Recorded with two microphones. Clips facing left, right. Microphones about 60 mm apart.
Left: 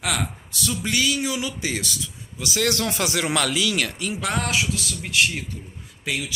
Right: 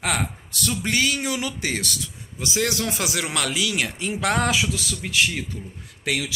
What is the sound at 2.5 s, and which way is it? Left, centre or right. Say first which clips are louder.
Speech: left 1 dB; centre.